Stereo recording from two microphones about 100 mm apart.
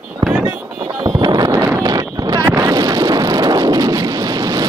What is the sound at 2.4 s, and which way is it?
Wind noise, 25° right (ahead or behind).